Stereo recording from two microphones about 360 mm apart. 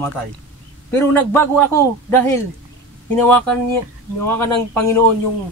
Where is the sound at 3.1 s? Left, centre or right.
Centre.